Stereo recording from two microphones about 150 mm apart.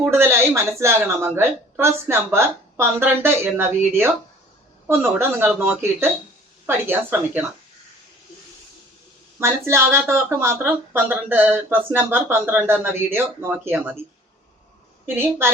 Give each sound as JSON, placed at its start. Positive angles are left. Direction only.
{"t": 0.0, "sound": "a woman's voice", "side_deg": -15}
{"t": 9.4, "sound": "a woman's voice", "side_deg": -15}
{"t": 15.0, "sound": "a woman's voice", "side_deg": -15}